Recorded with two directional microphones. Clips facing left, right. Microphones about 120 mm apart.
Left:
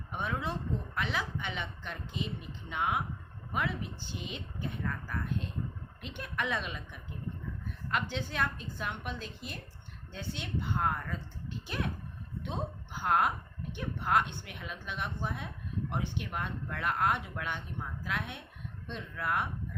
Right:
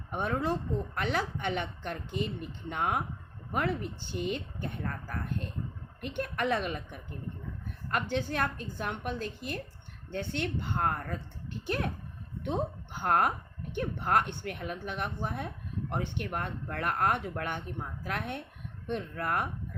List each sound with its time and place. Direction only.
0.1 s a woman's voice: 45° right (ahead or behind)
13.0 s speech: 50° right (ahead or behind)